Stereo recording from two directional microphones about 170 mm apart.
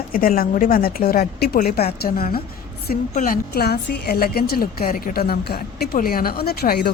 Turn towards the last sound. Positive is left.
turn(degrees=65)  # may be behind; listen again after turning